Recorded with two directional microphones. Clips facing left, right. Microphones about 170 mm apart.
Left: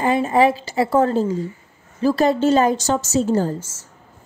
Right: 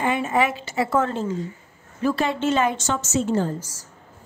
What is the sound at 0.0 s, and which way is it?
A woman's voice, 35° left (ahead or behind).